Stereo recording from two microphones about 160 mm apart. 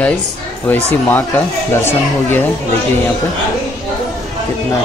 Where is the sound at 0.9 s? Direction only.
10° left (ahead or behind).